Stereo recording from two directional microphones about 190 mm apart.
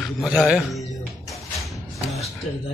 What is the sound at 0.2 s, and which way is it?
Speech, centre (ahead or behind).